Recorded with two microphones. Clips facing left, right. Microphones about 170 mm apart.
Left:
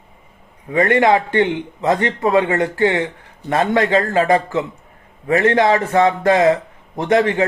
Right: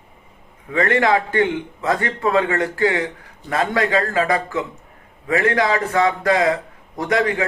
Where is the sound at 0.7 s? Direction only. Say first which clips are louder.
Left 3 dB; 20° left (ahead or behind).